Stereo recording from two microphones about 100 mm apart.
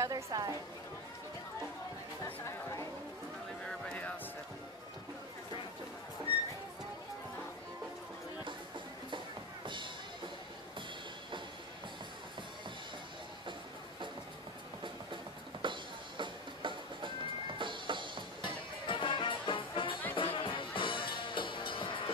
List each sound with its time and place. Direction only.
0.0 s a woman's voice: 40° right (ahead or behind)
2.2 s speech: 30° left (ahead or behind)
3.6 s music: 15° left (ahead or behind)
15.6 s music: 55° right (ahead or behind)
18.4 s music: 55° left (ahead or behind)